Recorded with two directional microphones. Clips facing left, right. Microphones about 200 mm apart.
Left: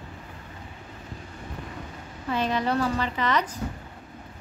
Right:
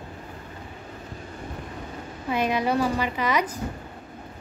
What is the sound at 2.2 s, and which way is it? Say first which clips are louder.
A woman's voice: right 2 dB; 15° right (ahead or behind).